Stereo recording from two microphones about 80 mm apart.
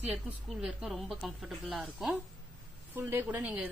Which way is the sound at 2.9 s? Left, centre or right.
Right.